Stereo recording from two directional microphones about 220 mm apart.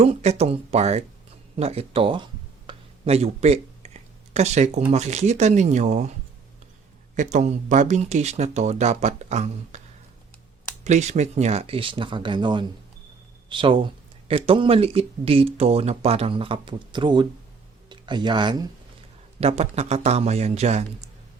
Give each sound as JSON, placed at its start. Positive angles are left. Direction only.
{"t": 0.0, "sound": "speech", "side_deg": -30}
{"t": 7.2, "sound": "speech", "side_deg": -35}
{"t": 10.8, "sound": "speech", "side_deg": -30}